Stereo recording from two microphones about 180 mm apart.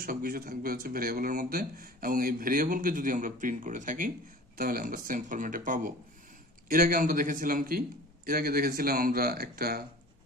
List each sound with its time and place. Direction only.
0.0 s a man's voice: 50° right (ahead or behind)